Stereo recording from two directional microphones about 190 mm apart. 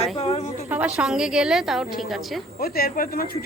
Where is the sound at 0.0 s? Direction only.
35° left (ahead or behind).